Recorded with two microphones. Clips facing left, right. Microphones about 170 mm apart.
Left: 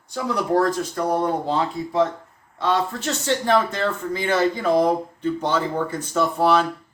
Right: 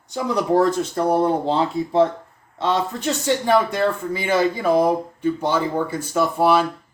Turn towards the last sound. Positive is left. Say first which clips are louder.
# right 1 dB
turn(degrees=-10)  # may be behind; listen again after turning